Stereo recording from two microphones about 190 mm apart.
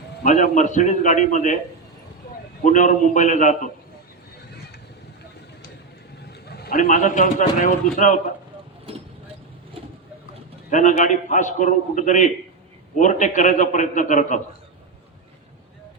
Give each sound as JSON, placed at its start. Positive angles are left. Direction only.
{"t": 0.2, "sound": "a man's voice", "side_deg": 40}
{"t": 2.6, "sound": "a man's voice", "side_deg": 40}
{"t": 6.5, "sound": "a man's voice", "side_deg": 55}
{"t": 10.7, "sound": "a man's voice", "side_deg": 40}